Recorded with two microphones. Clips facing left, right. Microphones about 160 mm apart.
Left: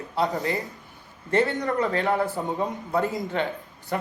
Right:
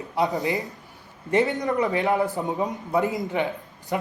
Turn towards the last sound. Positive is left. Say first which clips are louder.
# right 1 dB
turn(degrees=-15)  # may be behind; listen again after turning